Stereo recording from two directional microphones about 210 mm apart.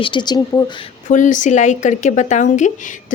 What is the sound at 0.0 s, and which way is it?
Speech, 20° left (ahead or behind).